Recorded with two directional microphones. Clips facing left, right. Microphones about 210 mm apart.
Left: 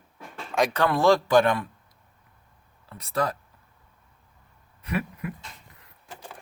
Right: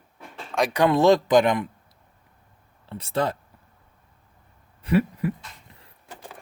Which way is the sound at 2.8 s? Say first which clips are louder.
Right 2 dB; 30° right (ahead or behind).